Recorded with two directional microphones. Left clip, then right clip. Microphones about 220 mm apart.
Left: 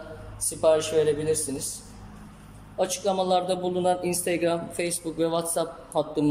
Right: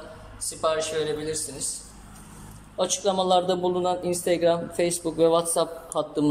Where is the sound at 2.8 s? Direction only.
Centre (ahead or behind).